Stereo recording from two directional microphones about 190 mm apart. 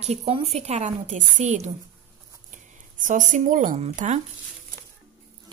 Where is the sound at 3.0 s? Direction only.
40° right (ahead or behind).